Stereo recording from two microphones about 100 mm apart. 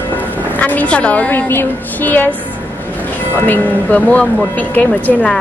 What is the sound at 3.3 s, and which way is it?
A woman's voice, 20° left (ahead or behind).